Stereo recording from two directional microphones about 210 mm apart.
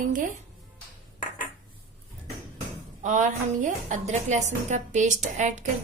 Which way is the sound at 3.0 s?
35° right (ahead or behind).